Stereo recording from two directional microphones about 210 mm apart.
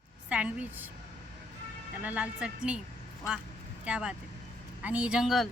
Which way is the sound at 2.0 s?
5° right (ahead or behind).